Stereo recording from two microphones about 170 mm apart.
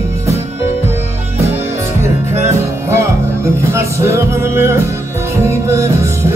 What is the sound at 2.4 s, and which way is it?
Music, 15° right (ahead or behind).